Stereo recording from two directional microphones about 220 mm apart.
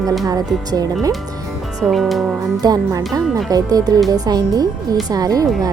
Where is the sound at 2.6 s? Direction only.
15° right (ahead or behind).